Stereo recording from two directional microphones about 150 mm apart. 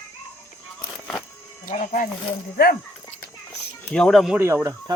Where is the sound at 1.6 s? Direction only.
65° left (ahead or behind).